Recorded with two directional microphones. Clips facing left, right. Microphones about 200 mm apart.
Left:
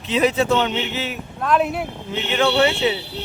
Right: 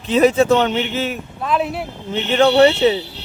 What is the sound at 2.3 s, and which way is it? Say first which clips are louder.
Speech: right 6 dB; 40° right (ahead or behind).